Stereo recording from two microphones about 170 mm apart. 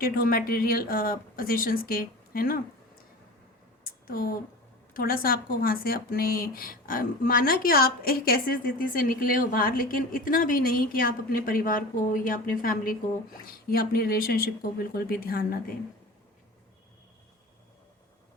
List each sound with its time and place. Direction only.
0.0 s speech: 60° left (ahead or behind)
3.8 s a sound: 60° left (ahead or behind)
4.9 s speech: 60° left (ahead or behind)